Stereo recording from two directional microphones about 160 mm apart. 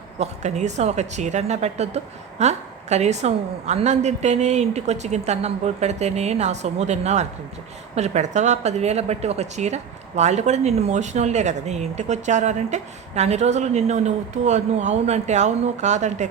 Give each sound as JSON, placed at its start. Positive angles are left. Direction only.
{"t": 0.2, "sound": "a woman's voice", "side_deg": -45}